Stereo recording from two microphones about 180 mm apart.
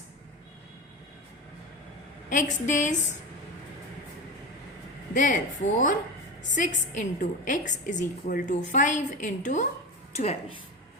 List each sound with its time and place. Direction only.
2.3 s a woman's voice: 45° left (ahead or behind)
5.1 s a woman's voice: 45° left (ahead or behind)